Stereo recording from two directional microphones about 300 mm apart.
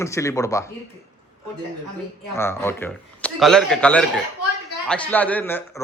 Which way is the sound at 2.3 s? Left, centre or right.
Centre.